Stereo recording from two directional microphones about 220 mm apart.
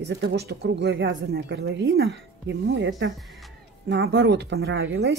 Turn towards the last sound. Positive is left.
turn(degrees=-50)  # may be behind; listen again after turning